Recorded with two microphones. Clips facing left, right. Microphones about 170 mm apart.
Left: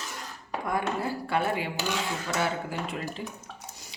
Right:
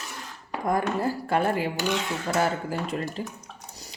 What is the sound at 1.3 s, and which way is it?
Speech, 45° right (ahead or behind).